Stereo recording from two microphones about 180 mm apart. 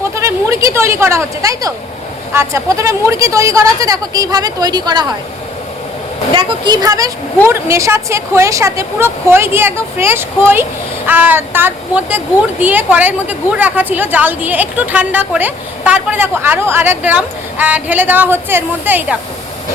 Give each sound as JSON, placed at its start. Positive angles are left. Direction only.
{"t": 0.2, "sound": "speech", "side_deg": -15}
{"t": 6.3, "sound": "speech", "side_deg": -20}